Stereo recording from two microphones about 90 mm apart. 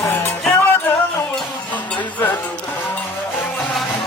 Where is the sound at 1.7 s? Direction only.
15° left (ahead or behind).